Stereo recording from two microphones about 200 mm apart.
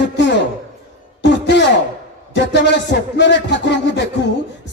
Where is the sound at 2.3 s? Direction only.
60° left (ahead or behind).